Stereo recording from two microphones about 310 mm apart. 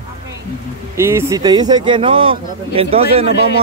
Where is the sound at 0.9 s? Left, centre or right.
Centre.